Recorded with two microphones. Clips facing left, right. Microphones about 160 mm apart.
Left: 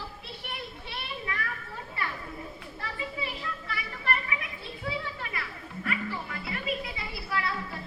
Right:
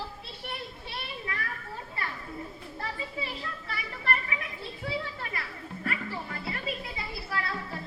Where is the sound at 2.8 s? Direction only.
35° right (ahead or behind).